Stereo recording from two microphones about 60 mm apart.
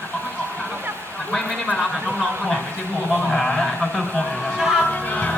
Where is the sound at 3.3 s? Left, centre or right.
Centre.